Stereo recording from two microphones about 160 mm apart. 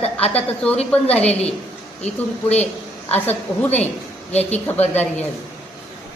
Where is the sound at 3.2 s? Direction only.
10° left (ahead or behind).